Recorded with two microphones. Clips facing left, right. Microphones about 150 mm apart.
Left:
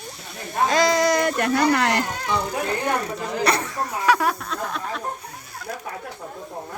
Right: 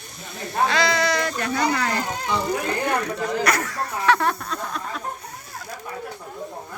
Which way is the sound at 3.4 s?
25° left (ahead or behind).